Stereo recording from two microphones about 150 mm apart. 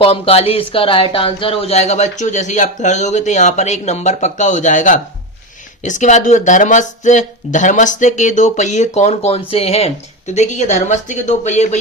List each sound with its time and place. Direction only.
0.0 s speech: 40° left (ahead or behind)